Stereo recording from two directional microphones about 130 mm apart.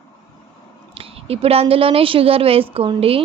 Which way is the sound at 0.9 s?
45° right (ahead or behind).